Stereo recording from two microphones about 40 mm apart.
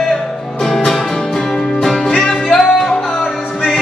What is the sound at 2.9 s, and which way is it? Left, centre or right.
Music, left.